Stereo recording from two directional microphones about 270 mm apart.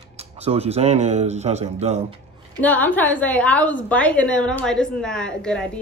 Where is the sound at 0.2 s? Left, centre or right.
Right.